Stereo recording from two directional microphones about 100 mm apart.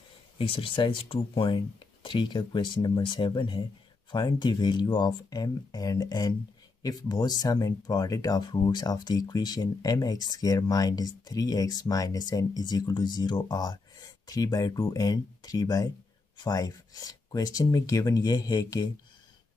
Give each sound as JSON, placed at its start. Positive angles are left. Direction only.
{"t": 0.4, "sound": "speech", "side_deg": 65}